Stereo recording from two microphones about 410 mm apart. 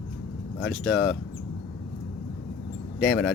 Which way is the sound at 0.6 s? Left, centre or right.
Centre.